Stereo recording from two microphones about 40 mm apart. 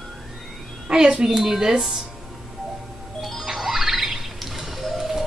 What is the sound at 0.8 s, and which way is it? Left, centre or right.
A woman's voice, right.